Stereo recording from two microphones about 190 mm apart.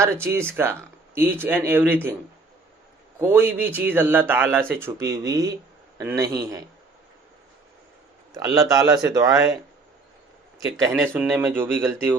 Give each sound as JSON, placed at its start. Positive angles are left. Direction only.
{"t": 0.0, "sound": "speech", "side_deg": -15}
{"t": 3.2, "sound": "speech", "side_deg": -10}
{"t": 8.4, "sound": "speech", "side_deg": -20}
{"t": 11.0, "sound": "speech", "side_deg": -10}